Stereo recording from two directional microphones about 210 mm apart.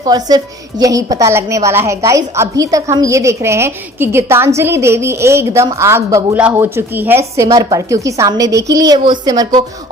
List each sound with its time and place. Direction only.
0.0 s a woman's voice: 20° right (ahead or behind)